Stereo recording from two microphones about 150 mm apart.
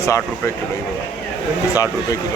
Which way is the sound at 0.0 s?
20° left (ahead or behind).